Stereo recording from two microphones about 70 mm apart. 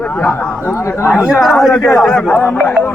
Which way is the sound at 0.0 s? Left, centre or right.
Centre.